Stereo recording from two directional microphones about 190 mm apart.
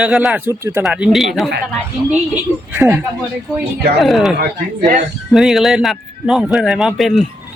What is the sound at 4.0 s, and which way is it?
Speech, centre (ahead or behind).